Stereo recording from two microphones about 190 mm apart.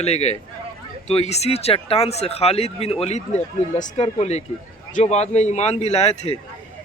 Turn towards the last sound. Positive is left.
turn(degrees=35)  # may be behind; listen again after turning